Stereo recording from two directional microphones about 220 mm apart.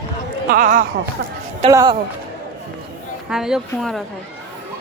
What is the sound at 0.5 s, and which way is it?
Speech, 40° right (ahead or behind).